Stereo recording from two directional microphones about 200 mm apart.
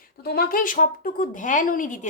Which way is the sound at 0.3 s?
50° left (ahead or behind).